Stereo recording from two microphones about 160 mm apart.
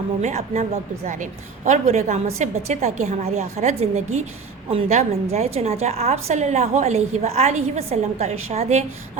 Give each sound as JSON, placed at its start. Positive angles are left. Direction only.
{"t": 0.2, "sound": "a woman's voice", "side_deg": -45}